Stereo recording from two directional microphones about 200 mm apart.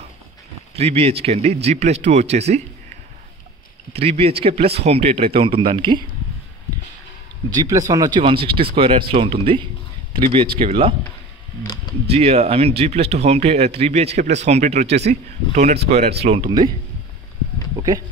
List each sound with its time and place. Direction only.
0.7 s speech: 30° right (ahead or behind)
7.4 s speech: 15° right (ahead or behind)
11.6 s a sound: 20° left (ahead or behind)
12.1 s speech: 30° right (ahead or behind)
17.7 s speech: 20° right (ahead or behind)